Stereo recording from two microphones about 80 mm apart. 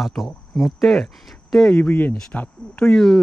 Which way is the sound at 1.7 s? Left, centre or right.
Left.